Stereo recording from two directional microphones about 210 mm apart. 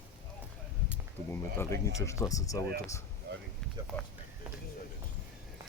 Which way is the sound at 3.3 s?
50° right (ahead or behind).